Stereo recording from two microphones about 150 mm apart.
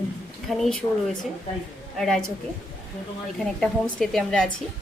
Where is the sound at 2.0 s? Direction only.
5° left (ahead or behind).